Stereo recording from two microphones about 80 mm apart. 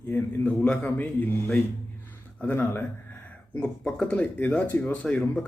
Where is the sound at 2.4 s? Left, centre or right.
Left.